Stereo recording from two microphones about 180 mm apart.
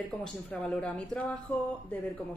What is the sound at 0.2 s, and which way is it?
A woman's voice, 5° left (ahead or behind).